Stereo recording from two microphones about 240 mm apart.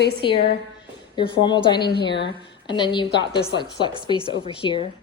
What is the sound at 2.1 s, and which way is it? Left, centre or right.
Speech, left.